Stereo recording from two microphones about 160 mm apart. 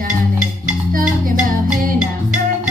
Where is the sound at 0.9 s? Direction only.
60° right (ahead or behind).